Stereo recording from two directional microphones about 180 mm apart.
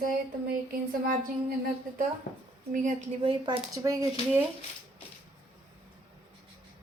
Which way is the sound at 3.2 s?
25° right (ahead or behind).